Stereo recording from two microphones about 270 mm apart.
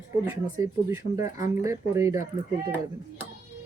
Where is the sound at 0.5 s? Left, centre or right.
Centre.